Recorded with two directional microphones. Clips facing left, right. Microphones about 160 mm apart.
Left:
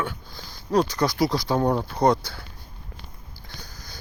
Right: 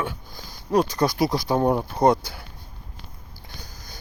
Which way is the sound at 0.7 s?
20° right (ahead or behind).